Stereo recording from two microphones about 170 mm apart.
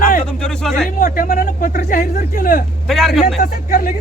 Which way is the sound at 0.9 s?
50° left (ahead or behind).